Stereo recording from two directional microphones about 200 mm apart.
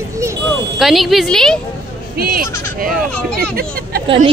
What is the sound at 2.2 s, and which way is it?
Speech, 45° right (ahead or behind).